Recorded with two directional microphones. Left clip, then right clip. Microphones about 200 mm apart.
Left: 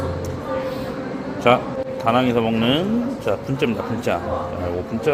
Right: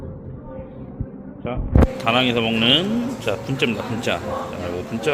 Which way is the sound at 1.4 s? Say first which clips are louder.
Left 14 dB; 20° left (ahead or behind).